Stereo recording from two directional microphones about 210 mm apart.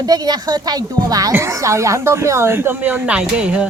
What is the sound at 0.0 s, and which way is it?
A woman's voice, 20° right (ahead or behind).